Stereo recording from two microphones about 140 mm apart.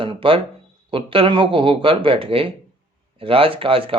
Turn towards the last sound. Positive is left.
turn(degrees=-40)  # may be behind; listen again after turning